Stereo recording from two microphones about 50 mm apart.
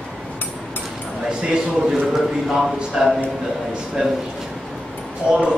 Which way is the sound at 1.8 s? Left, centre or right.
Centre.